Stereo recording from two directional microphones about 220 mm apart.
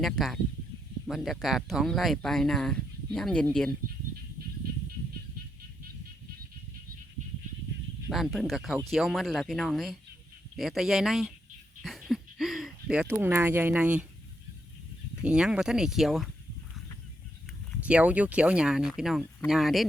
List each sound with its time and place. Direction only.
0.0 s speech: centre (ahead or behind)
8.1 s speech: centre (ahead or behind)
11.8 s a sound: centre (ahead or behind)
15.2 s speech: 5° right (ahead or behind)
17.7 s speech: 5° right (ahead or behind)